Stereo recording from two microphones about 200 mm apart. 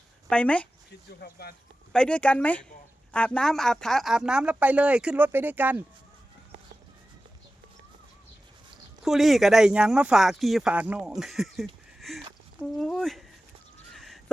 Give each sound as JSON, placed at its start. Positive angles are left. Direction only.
{"t": 0.3, "sound": "speech", "side_deg": 5}
{"t": 1.2, "sound": "speech", "side_deg": 50}
{"t": 1.9, "sound": "speech", "side_deg": 5}
{"t": 9.0, "sound": "speech", "side_deg": 0}
{"t": 13.9, "sound": "crow", "side_deg": 0}